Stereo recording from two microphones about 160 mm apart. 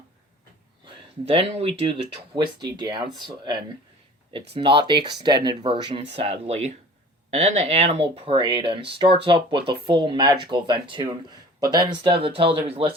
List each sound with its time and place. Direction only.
0.9 s speech: 40° right (ahead or behind)